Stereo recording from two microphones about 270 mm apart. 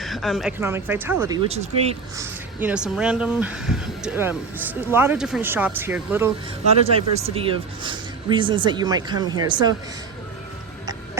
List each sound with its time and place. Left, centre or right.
0.0 s speech: centre
1.5 s speech: right
2.1 s speech: centre
6.8 s speech: right